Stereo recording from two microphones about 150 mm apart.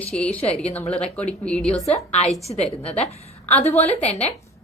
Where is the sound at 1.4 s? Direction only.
5° left (ahead or behind).